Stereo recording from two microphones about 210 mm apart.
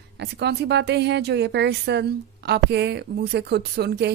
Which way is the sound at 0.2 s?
50° right (ahead or behind).